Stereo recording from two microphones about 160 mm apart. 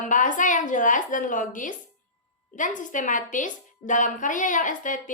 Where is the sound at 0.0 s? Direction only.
55° left (ahead or behind).